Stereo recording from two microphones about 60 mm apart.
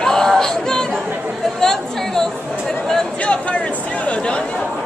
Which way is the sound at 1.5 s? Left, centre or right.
Centre.